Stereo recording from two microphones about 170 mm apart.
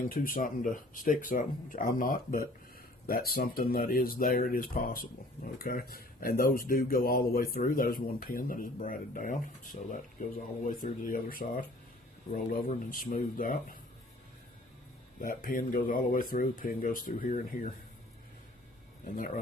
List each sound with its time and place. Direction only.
0.1 s speech: 55° left (ahead or behind)
10.7 s speech: 55° left (ahead or behind)
15.2 s speech: 55° left (ahead or behind)
19.0 s speech: 55° left (ahead or behind)